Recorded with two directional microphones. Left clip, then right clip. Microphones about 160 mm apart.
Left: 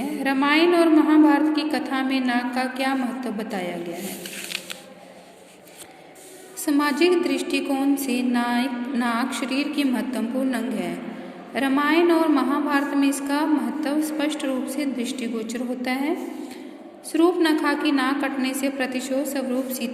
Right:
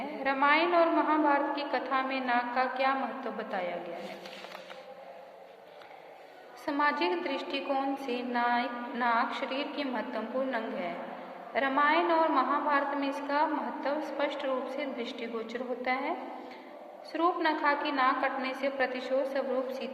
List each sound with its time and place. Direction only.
0.0 s a woman's voice: 15° left (ahead or behind)
6.7 s a woman's voice: 15° left (ahead or behind)